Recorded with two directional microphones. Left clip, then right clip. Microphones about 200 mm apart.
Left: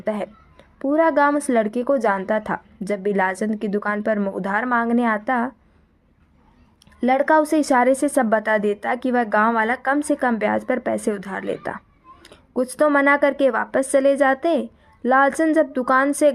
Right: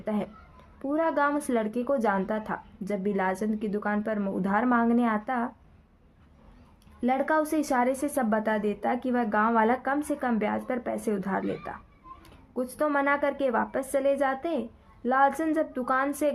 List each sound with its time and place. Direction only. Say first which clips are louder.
0.0 s a woman's voice: left 7 dB; 35° left (ahead or behind)
7.0 s a woman's voice: left 9 dB; 35° left (ahead or behind)